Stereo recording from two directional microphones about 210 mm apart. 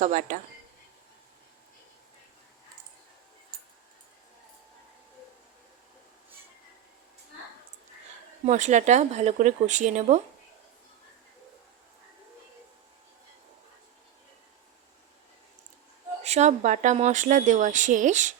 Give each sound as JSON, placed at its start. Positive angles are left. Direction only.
{"t": 0.0, "sound": "speech", "side_deg": -40}
{"t": 8.4, "sound": "speech", "side_deg": -35}
{"t": 16.2, "sound": "speech", "side_deg": -30}